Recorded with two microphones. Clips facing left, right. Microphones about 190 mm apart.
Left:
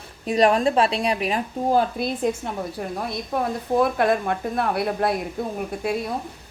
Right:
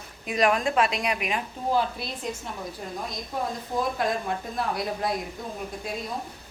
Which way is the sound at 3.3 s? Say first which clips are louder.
Left 7 dB; 60° left (ahead or behind).